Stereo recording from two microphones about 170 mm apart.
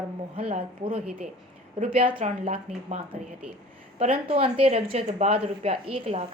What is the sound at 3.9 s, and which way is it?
A woman's voice, 35° right (ahead or behind).